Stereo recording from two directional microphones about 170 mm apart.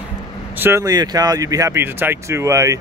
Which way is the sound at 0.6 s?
15° right (ahead or behind).